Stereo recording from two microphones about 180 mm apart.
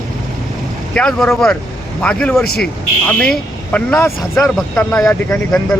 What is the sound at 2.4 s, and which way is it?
Speech, 60° left (ahead or behind).